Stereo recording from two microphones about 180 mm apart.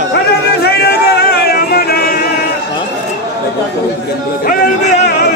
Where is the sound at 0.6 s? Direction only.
60° left (ahead or behind).